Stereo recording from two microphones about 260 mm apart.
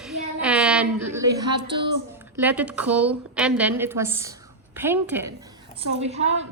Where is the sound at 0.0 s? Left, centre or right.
Centre.